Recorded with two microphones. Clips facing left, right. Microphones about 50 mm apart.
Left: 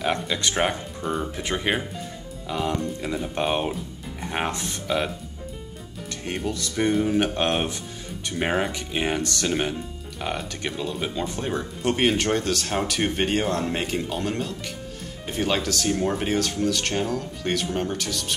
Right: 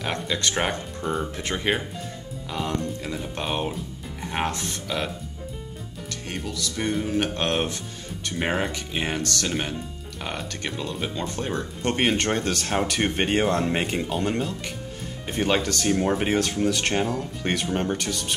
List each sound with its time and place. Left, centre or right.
0.0 s speech: centre
6.2 s speech: centre
9.2 s speech: centre
9.5 s speech: centre